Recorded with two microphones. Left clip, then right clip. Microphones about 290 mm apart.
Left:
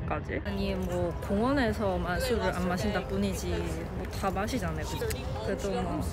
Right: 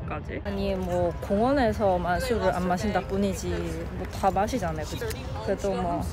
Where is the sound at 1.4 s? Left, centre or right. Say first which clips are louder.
Right 5 dB; centre.